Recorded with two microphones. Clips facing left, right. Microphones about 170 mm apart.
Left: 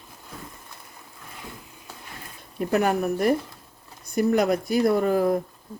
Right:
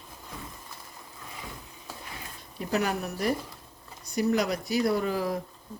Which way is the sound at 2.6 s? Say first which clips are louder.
Left 6 dB; 50° left (ahead or behind).